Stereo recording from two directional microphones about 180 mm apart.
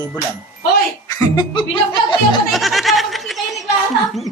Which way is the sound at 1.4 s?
25° left (ahead or behind).